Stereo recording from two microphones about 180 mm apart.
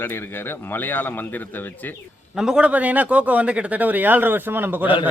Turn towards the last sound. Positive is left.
turn(degrees=-10)  # may be behind; listen again after turning